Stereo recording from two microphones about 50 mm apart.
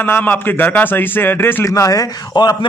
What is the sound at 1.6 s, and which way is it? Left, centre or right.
Speech, left.